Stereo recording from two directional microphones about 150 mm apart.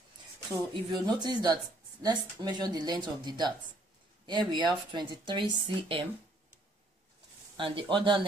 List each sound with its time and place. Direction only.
0.8 s speech: 30° right (ahead or behind)
7.5 s speech: 35° right (ahead or behind)